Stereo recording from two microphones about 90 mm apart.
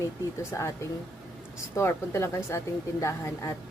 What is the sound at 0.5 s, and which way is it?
Speech, 30° left (ahead or behind).